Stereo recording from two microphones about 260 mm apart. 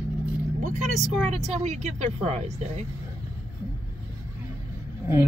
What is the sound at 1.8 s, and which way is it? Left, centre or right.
Speech, right.